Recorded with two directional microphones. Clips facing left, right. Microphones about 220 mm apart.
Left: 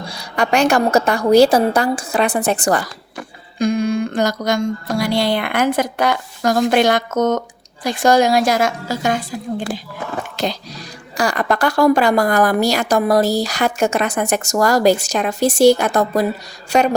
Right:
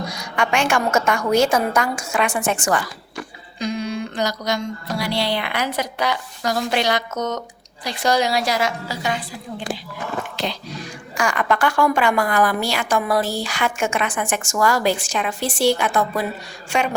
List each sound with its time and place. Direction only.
0.0 s a woman's voice: 30° left (ahead or behind)
3.6 s music: 50° left (ahead or behind)
10.3 s a woman's voice: 40° left (ahead or behind)